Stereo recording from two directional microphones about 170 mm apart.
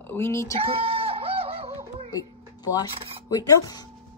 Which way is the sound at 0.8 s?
35° right (ahead or behind).